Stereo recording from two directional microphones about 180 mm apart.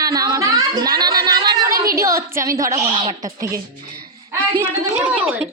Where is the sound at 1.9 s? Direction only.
15° right (ahead or behind).